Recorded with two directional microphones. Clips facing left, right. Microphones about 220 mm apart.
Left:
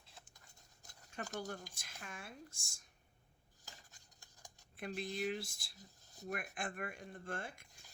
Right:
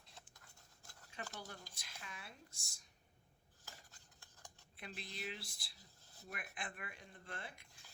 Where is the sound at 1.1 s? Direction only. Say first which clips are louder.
Left 7 dB; 45° left (ahead or behind).